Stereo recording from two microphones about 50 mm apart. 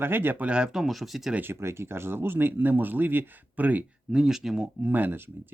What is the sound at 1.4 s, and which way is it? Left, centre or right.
Speech, right.